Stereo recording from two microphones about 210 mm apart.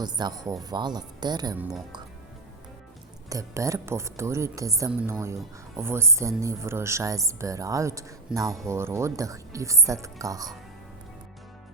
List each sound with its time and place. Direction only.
0.0 s speech: 20° right (ahead or behind)
3.2 s speech: 15° right (ahead or behind)